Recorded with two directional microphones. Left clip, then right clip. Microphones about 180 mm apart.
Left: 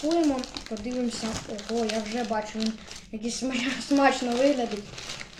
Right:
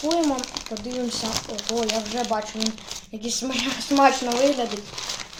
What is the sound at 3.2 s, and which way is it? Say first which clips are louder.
Speech: right 3 dB; centre (ahead or behind).